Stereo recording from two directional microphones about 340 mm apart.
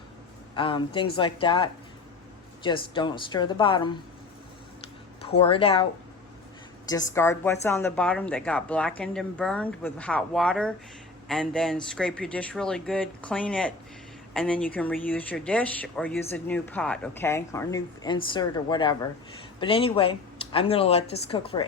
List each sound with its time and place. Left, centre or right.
0.5 s speech: centre
5.4 s speech: centre